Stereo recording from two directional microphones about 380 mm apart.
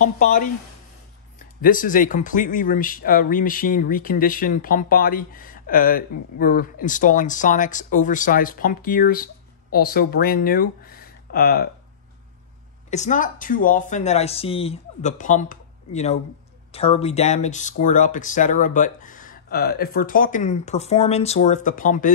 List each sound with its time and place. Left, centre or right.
0.0 s speech: left
1.6 s speech: left
12.9 s speech: centre